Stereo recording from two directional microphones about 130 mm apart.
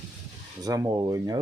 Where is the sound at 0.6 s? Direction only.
30° right (ahead or behind).